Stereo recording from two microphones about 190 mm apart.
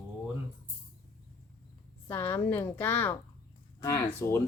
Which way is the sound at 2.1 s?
10° left (ahead or behind).